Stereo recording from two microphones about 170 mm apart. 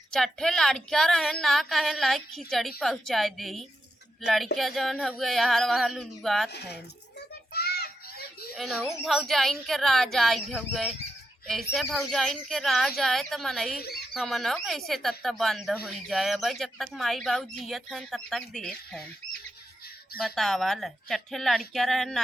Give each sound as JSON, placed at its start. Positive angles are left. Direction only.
{"t": 0.1, "sound": "speech", "side_deg": 5}
{"t": 7.5, "sound": "children playing", "side_deg": 65}
{"t": 8.5, "sound": "speech", "side_deg": 0}
{"t": 20.2, "sound": "speech", "side_deg": 0}